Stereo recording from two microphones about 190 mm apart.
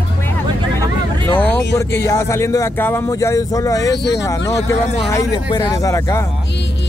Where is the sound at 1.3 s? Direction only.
10° left (ahead or behind).